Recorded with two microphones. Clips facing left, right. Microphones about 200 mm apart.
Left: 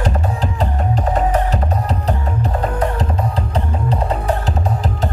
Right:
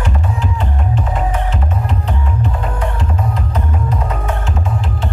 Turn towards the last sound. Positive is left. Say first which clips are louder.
# left 2 dB
turn(degrees=35)  # may be behind; listen again after turning